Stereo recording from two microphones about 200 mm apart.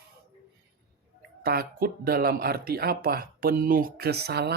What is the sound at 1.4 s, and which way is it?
Speech, 50° right (ahead or behind).